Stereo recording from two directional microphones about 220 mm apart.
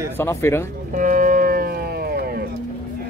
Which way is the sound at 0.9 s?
40° right (ahead or behind).